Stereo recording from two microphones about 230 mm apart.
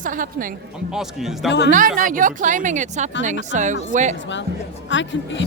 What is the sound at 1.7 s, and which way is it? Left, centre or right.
Speech, right.